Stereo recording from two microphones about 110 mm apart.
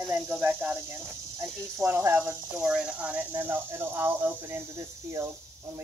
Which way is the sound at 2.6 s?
10° right (ahead or behind).